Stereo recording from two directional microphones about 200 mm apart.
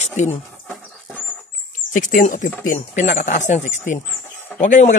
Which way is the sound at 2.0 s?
40° left (ahead or behind).